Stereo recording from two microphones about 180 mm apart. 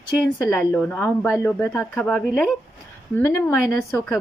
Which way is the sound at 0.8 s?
5° left (ahead or behind).